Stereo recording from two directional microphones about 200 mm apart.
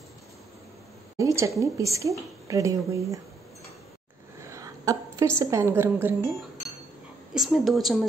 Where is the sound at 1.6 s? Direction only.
15° right (ahead or behind).